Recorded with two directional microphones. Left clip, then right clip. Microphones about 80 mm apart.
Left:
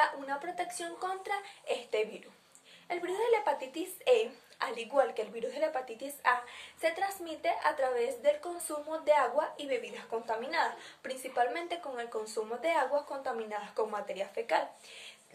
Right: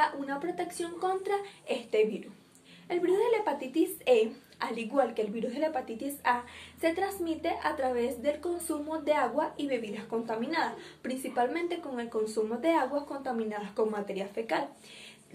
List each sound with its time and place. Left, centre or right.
0.0 s a woman's voice: left